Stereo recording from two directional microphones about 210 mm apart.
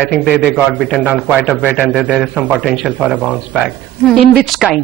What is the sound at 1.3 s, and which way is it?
A man's voice, 10° left (ahead or behind).